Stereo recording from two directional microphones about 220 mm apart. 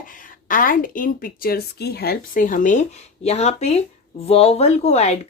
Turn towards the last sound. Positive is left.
turn(degrees=30)  # may be behind; listen again after turning